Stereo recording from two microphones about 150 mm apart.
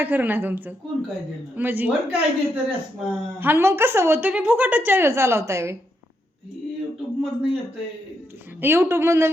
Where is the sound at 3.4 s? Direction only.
15° right (ahead or behind).